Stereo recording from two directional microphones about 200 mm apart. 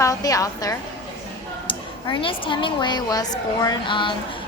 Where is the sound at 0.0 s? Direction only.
15° left (ahead or behind).